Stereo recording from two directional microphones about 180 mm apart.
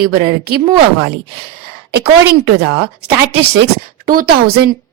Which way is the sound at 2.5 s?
65° right (ahead or behind).